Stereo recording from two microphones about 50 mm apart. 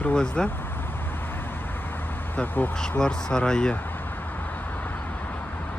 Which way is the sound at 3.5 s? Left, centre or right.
Centre.